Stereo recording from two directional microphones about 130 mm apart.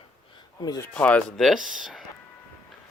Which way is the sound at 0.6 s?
30° left (ahead or behind).